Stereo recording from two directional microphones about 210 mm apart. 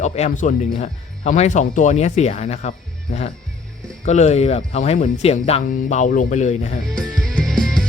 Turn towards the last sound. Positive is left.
turn(degrees=0)  # may be behind; listen again after turning